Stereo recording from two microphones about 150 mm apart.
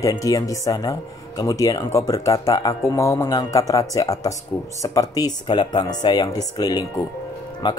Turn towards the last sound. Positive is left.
turn(degrees=30)  # may be behind; listen again after turning